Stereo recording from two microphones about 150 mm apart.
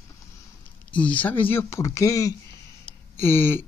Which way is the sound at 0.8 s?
10° left (ahead or behind).